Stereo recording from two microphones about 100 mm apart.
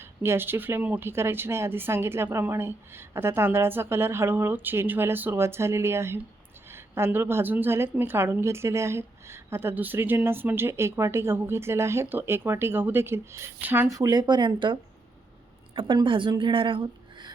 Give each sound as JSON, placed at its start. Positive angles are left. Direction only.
{"t": 0.0, "sound": "a woman's voice", "side_deg": -25}
{"t": 13.9, "sound": "a woman's voice", "side_deg": -40}